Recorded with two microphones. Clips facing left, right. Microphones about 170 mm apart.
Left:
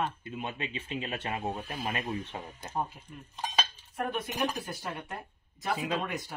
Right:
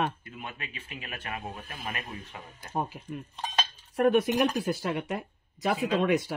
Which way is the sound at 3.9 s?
85° right.